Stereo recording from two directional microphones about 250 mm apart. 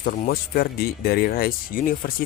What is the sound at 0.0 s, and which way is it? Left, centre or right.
Speech, left.